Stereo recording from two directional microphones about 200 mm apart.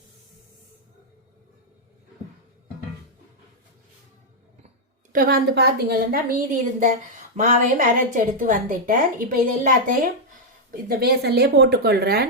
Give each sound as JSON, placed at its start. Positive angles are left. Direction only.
{"t": 5.1, "sound": "a woman's voice", "side_deg": -45}